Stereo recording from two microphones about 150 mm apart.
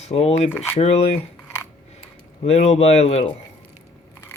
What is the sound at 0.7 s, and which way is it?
Speech, 45° left (ahead or behind).